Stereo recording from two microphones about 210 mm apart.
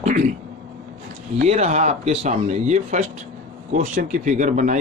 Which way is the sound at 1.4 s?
30° right (ahead or behind).